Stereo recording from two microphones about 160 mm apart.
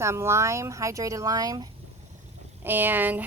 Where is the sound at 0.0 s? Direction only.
15° right (ahead or behind).